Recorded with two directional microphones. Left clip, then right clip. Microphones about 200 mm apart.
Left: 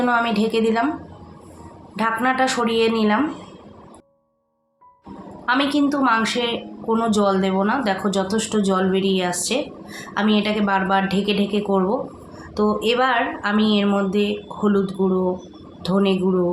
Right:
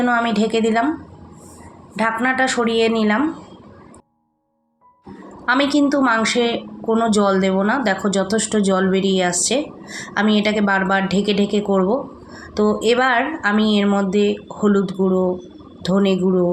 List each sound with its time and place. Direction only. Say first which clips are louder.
0.0 s speech: right 1 dB; 15° right (ahead or behind)
2.0 s speech: right 1 dB; 15° right (ahead or behind)
5.5 s a woman's voice: right 3 dB; 25° right (ahead or behind)